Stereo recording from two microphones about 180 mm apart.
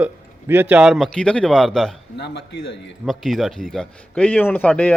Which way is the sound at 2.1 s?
70° left (ahead or behind).